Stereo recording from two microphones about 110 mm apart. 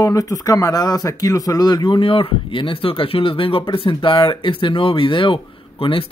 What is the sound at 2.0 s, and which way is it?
A man's voice, 50° left (ahead or behind).